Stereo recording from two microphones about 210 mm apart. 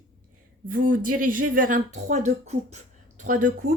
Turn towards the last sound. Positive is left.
turn(degrees=-40)  # may be behind; listen again after turning